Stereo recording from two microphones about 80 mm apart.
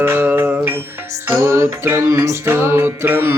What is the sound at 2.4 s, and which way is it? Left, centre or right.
Music, right.